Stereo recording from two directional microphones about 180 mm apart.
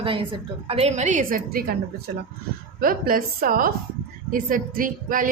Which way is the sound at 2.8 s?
55° right (ahead or behind).